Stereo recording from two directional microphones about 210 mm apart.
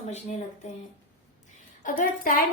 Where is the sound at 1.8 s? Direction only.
40° left (ahead or behind).